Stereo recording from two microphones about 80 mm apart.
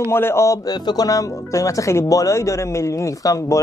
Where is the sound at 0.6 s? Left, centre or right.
Left.